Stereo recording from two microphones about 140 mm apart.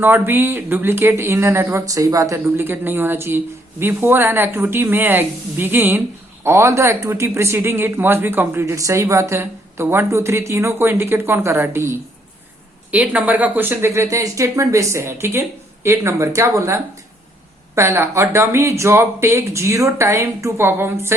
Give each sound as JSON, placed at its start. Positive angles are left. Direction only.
{"t": 0.0, "sound": "speech", "side_deg": -15}